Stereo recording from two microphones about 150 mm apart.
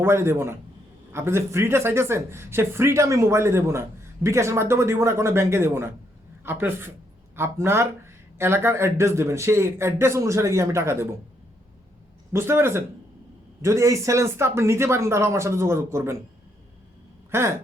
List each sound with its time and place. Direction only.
0.0 s speech: 15° right (ahead or behind)
12.3 s speech: 15° right (ahead or behind)